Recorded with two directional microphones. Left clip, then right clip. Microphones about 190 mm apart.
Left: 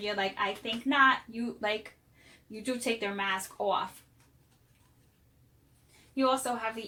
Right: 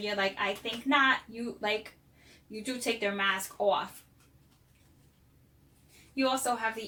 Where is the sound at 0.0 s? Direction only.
35° left (ahead or behind).